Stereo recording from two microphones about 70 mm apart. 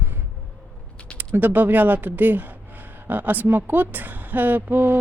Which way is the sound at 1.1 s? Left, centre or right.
Right.